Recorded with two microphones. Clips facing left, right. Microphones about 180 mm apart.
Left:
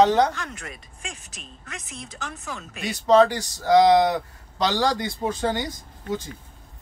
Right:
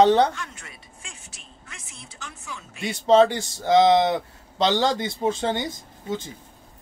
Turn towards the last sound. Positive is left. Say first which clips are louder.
# left 1 dB
turn(degrees=-25)  # may be behind; listen again after turning